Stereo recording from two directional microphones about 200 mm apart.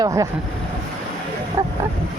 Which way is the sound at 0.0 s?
15° right (ahead or behind).